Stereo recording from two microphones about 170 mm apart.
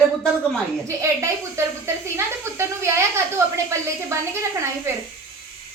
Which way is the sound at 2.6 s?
15° right (ahead or behind).